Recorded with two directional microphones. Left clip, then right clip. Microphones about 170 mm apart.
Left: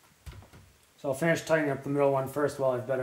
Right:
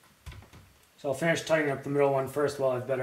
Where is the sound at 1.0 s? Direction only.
20° left (ahead or behind).